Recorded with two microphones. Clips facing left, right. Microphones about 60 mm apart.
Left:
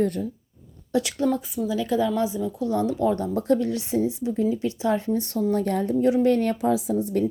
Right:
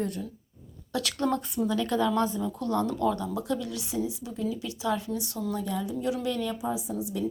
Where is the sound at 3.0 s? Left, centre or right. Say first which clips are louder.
Left 4 dB; left.